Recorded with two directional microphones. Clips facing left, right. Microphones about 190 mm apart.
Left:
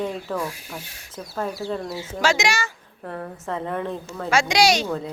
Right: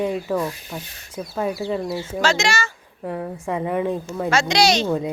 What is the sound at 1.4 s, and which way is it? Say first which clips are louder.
Speech: right 3 dB; 10° right (ahead or behind).